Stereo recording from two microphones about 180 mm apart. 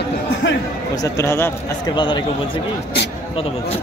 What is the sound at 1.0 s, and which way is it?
Speech, 15° left (ahead or behind).